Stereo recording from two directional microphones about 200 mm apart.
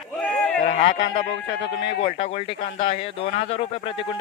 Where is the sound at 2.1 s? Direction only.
35° left (ahead or behind).